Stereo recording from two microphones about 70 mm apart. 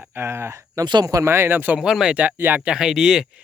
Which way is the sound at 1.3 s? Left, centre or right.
Right.